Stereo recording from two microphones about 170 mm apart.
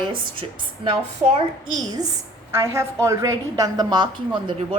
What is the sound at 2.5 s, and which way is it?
A woman's voice, 15° right (ahead or behind).